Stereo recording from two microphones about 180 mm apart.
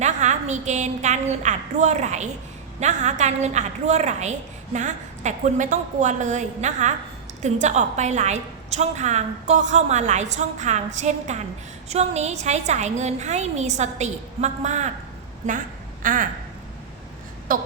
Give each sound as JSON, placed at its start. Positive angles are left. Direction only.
{"t": 0.0, "sound": "a woman's voice", "side_deg": -40}
{"t": 16.0, "sound": "speech", "side_deg": -45}
{"t": 17.5, "sound": "speech", "side_deg": -50}